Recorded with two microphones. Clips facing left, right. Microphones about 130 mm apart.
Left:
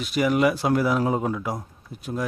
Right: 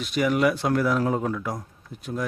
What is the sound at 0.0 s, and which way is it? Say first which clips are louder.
A man's voice: left 1 dB; 5° left (ahead or behind).